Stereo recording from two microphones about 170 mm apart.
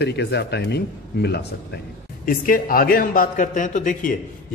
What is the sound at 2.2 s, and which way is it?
A man's voice, 55° left (ahead or behind).